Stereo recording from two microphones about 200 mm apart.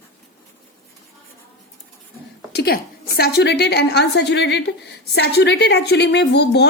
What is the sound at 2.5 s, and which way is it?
Speech, 50° left (ahead or behind).